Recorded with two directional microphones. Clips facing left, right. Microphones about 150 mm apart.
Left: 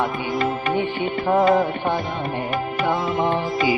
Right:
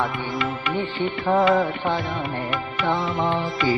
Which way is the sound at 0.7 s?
10° left (ahead or behind).